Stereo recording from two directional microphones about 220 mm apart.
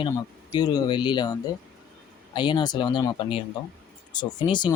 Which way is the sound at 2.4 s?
20° left (ahead or behind).